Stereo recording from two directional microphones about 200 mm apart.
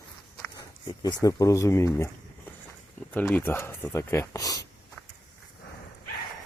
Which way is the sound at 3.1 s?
5° left (ahead or behind).